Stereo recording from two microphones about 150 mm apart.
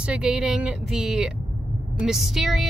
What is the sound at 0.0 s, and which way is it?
A woman's voice, 5° right (ahead or behind).